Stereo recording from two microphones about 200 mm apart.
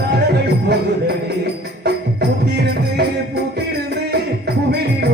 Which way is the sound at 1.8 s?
55° right (ahead or behind).